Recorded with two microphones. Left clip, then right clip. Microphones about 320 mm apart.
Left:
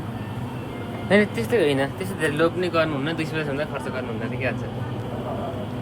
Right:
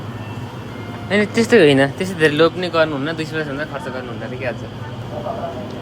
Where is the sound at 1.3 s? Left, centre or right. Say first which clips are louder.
Right 9 dB; right; by 3.6 s centre.